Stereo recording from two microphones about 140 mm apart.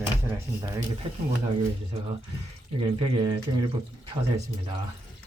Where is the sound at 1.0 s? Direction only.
40° right (ahead or behind).